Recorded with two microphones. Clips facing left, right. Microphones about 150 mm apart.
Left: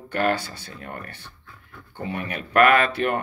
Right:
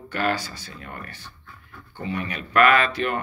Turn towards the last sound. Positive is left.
turn(degrees=55)  # may be behind; listen again after turning